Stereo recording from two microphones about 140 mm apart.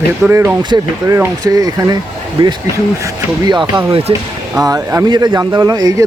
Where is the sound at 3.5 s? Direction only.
35° right (ahead or behind).